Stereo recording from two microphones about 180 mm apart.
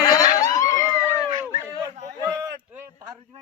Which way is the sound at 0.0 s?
20° left (ahead or behind).